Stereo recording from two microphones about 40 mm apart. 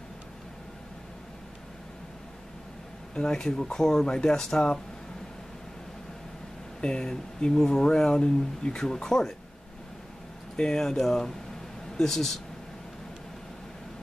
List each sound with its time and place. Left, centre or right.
3.2 s speech: centre
6.8 s speech: left
10.5 s speech: centre